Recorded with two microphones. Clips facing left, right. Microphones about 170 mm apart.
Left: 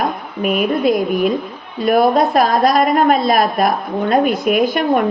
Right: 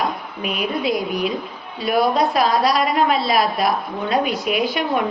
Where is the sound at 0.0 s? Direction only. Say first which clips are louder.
Left 5 dB; 50° left (ahead or behind).